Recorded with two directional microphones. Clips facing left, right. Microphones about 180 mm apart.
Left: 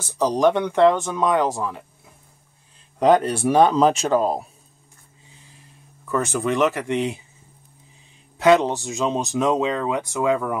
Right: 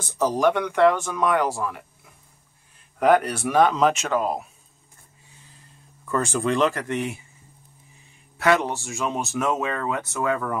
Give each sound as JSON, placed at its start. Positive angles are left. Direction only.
{"t": 0.0, "sound": "speech", "side_deg": 15}
{"t": 3.0, "sound": "speech", "side_deg": 25}
{"t": 6.6, "sound": "speech", "side_deg": 10}
{"t": 8.4, "sound": "speech", "side_deg": 20}